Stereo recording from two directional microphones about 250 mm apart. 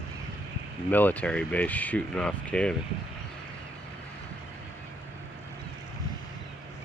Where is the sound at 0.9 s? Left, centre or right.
Centre.